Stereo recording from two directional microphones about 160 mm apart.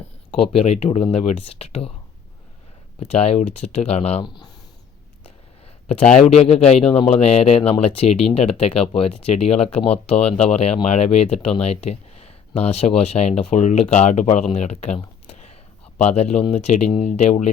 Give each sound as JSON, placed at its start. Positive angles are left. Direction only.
{"t": 0.5, "sound": "speech", "side_deg": 40}
{"t": 3.0, "sound": "speech", "side_deg": 40}
{"t": 6.5, "sound": "speech", "side_deg": 40}
{"t": 16.0, "sound": "speech", "side_deg": 45}